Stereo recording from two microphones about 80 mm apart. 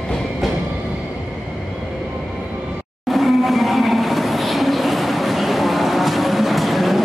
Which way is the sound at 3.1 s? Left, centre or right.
Centre.